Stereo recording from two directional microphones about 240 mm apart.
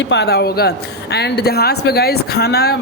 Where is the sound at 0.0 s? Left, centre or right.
Left.